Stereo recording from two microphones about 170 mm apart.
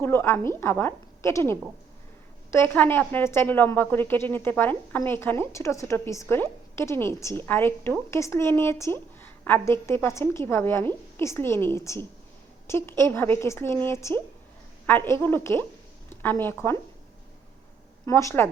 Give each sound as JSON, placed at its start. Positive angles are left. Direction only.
{"t": 0.0, "sound": "a woman's voice", "side_deg": 15}
{"t": 18.0, "sound": "a woman's voice", "side_deg": 15}